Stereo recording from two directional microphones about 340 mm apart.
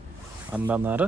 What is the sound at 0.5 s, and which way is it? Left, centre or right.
Speech, centre.